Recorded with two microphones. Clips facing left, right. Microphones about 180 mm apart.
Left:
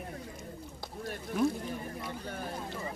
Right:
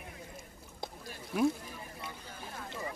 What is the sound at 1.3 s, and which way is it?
Speech, centre (ahead or behind).